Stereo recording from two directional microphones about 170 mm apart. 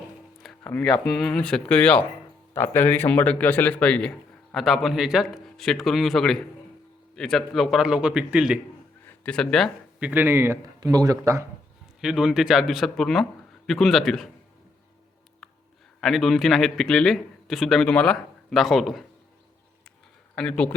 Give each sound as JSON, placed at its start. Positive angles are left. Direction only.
{"t": 0.6, "sound": "a man's voice", "side_deg": 10}
{"t": 9.0, "sound": "speech", "side_deg": 5}
{"t": 10.1, "sound": "speech", "side_deg": -10}
{"t": 11.9, "sound": "a man's voice", "side_deg": -5}
{"t": 16.0, "sound": "a man's voice", "side_deg": 0}
{"t": 20.3, "sound": "speech", "side_deg": 5}